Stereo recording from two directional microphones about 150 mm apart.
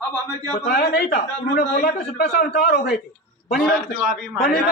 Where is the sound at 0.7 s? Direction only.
90° left.